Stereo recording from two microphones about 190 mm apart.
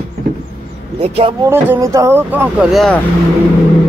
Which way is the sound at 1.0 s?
30° right (ahead or behind).